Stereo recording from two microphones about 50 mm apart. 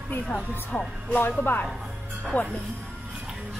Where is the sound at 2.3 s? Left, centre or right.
Left.